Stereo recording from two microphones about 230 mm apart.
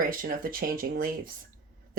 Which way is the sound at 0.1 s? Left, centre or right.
Right.